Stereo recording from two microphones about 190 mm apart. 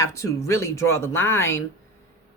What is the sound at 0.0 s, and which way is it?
Speech, 15° left (ahead or behind).